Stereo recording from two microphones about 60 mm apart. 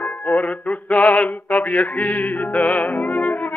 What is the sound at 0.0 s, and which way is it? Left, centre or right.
Music, left.